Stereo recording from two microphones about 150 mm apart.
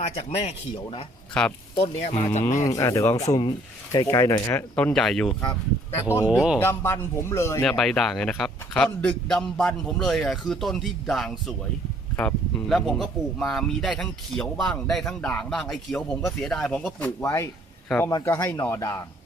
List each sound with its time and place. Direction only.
0.0 s speech: 45° left (ahead or behind)
1.3 s speech: 5° left (ahead or behind)
1.8 s speech: 45° left (ahead or behind)
2.6 s speech: 20° left (ahead or behind)
6.2 s a man's voice: 5° right (ahead or behind)
6.6 s speech: 15° left (ahead or behind)
7.6 s a man's voice: centre (ahead or behind)